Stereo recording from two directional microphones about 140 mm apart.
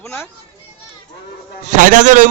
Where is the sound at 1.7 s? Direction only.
70° right (ahead or behind).